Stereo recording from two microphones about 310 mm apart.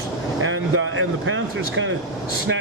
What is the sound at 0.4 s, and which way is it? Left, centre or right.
Speech, right.